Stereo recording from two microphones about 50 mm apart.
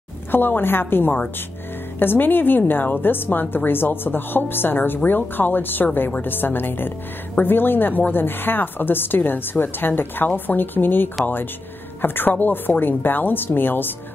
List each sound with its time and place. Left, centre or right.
0.3 s a woman's voice: left